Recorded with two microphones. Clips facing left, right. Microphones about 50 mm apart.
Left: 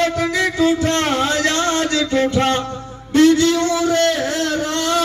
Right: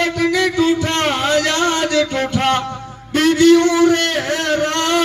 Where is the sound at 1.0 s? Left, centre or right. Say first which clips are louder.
Right 1 dB; right.